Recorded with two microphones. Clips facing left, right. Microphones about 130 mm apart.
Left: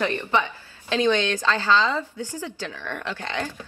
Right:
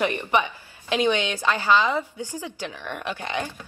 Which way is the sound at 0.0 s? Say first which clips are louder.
Right 1 dB; 15° right (ahead or behind).